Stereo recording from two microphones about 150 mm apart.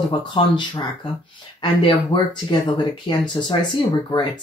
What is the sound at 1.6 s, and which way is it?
Speech, 30° left (ahead or behind).